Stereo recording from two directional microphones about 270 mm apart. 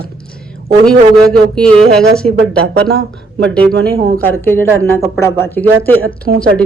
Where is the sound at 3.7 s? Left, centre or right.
Right.